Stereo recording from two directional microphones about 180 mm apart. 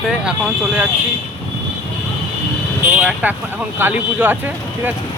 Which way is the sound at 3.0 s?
5° right (ahead or behind).